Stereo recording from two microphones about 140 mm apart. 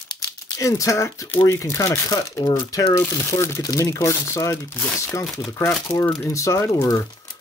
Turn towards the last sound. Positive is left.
turn(degrees=25)  # may be behind; listen again after turning